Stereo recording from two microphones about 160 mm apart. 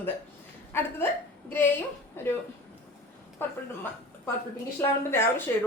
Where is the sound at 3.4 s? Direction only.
15° left (ahead or behind).